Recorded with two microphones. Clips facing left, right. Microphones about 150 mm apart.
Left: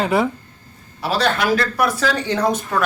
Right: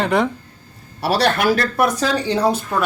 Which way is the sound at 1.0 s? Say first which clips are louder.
Right 2 dB; 65° right (ahead or behind).